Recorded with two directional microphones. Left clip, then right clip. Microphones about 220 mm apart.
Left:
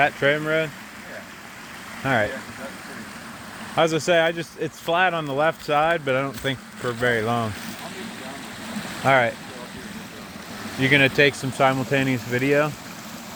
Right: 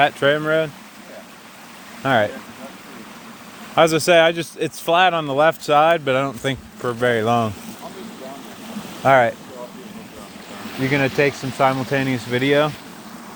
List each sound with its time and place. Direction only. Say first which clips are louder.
0.0 s speech: right 3 dB; 30° right (ahead or behind)
2.0 s speech: right 5 dB; 35° right (ahead or behind)
3.8 s speech: right 5 dB; 35° right (ahead or behind)
9.0 s speech: right 4 dB; 25° right (ahead or behind)
10.8 s speech: left 1 dB; 5° right (ahead or behind)